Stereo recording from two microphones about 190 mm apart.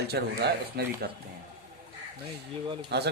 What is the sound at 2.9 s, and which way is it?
Speech, 60° right (ahead or behind).